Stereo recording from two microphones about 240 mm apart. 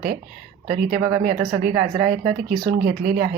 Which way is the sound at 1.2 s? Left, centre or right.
Right.